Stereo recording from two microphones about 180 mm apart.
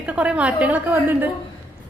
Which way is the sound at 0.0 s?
5° right (ahead or behind).